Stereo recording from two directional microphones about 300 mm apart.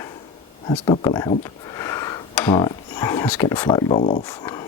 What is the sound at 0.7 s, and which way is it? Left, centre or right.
Speech, centre.